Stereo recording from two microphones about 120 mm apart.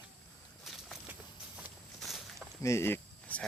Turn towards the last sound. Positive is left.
turn(degrees=15)  # may be behind; listen again after turning